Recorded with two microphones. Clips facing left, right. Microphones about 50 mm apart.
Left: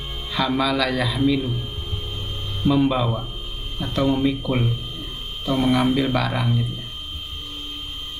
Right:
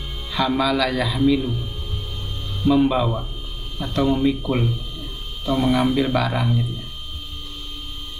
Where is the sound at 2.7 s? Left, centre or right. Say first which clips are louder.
Right 2 dB; centre.